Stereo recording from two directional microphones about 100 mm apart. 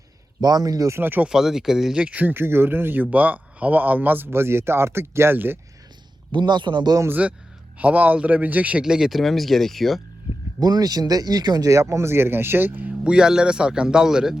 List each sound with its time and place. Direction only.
0.4 s speech: 40° right (ahead or behind)
0.9 s speech: 20° right (ahead or behind)
1.3 s speech: 5° right (ahead or behind); by 5.5 s 20° right (ahead or behind)
6.3 s speech: 50° right (ahead or behind)
7.1 s speech: 15° right (ahead or behind)
10.6 s speech: 40° right (ahead or behind); by 14.3 s 5° right (ahead or behind)